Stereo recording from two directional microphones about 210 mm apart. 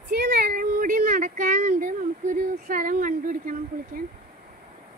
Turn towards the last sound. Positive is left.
turn(degrees=-40)  # may be behind; listen again after turning